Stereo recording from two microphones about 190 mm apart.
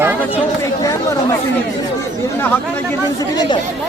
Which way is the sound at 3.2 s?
25° left (ahead or behind).